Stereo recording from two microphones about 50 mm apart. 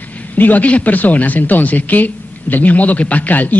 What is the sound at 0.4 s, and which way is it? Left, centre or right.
Speech, left.